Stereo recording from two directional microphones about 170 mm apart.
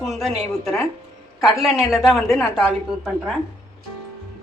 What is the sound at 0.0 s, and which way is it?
A woman's voice, centre (ahead or behind).